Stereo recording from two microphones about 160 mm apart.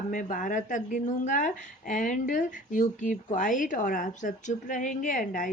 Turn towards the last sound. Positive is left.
turn(degrees=60)  # may be behind; listen again after turning